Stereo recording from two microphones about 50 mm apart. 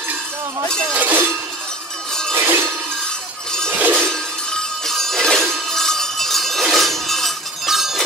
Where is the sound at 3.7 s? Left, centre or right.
Right.